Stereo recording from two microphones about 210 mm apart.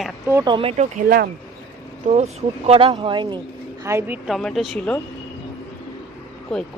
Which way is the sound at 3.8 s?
10° right (ahead or behind).